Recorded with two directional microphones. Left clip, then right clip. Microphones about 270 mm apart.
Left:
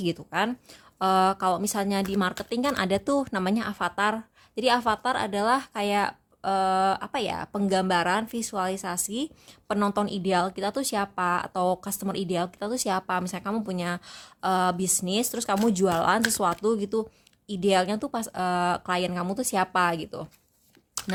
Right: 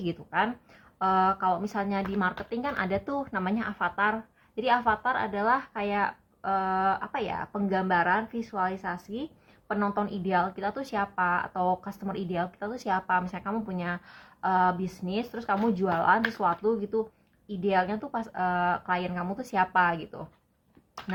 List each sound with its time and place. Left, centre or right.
0.0 s speech: left